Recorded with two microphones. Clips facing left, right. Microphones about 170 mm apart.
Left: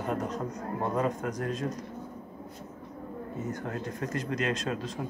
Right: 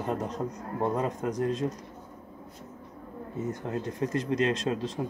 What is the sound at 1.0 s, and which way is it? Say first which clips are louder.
Speech: right 1 dB; 25° right (ahead or behind).